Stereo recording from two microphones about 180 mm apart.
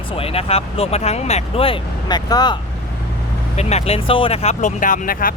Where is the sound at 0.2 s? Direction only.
35° left (ahead or behind).